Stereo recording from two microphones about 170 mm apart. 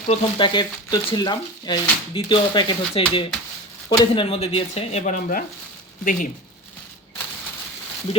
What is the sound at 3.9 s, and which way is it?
Speech, 30° left (ahead or behind).